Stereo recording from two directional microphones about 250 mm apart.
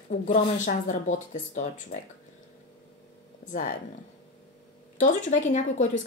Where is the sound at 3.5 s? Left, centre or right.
Left.